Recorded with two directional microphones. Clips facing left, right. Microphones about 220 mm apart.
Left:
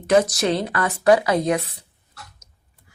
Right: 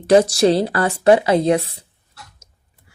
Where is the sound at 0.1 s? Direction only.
30° right (ahead or behind).